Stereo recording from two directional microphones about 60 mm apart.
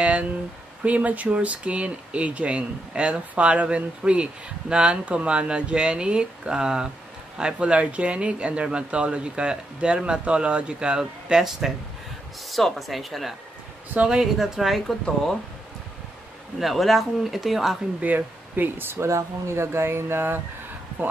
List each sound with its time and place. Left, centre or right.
0.0 s speech: right; by 15.0 s centre
16.5 s speech: centre
18.0 s speech: right
18.9 s speech: right